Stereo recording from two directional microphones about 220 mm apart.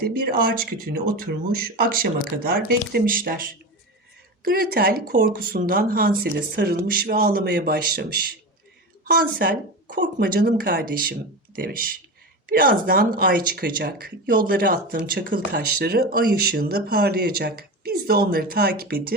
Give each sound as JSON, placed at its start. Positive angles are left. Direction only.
{"t": 0.3, "sound": "speech", "side_deg": -40}